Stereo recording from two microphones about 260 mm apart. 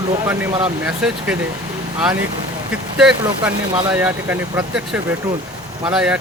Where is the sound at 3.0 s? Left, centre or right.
Centre.